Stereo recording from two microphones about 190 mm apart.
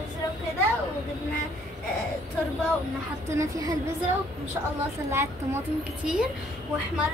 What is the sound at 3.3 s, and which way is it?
Speech, 15° right (ahead or behind).